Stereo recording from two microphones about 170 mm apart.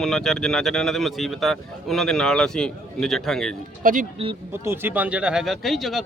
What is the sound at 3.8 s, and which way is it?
Speech, 55° right (ahead or behind).